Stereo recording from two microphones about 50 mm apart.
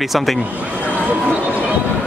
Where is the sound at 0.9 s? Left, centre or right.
Right.